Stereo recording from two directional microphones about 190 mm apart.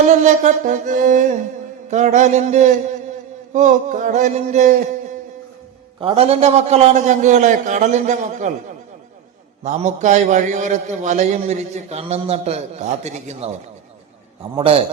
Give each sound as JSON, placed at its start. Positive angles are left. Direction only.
{"t": 0.0, "sound": "a man's voice", "side_deg": -40}
{"t": 6.0, "sound": "a man's voice", "side_deg": -30}
{"t": 9.6, "sound": "a man's voice", "side_deg": -40}
{"t": 14.5, "sound": "a man's voice", "side_deg": -30}